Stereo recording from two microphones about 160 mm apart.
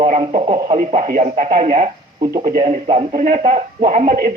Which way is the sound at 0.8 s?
60° right (ahead or behind).